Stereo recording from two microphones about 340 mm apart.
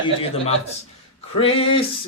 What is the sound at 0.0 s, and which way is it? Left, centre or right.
Speech, centre.